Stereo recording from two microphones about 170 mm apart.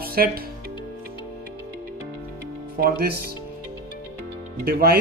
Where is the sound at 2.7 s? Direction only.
60° right (ahead or behind).